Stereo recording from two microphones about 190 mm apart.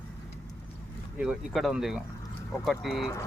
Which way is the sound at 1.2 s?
Centre (ahead or behind).